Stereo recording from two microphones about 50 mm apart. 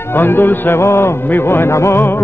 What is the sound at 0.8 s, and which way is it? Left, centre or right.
Speech, left.